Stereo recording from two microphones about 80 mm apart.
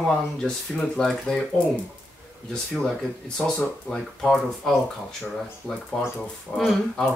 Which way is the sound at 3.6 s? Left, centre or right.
Centre.